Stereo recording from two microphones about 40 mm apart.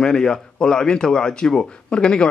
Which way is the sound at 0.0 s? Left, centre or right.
Centre.